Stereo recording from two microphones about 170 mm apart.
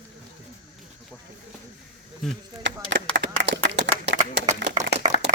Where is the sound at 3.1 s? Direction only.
90° right.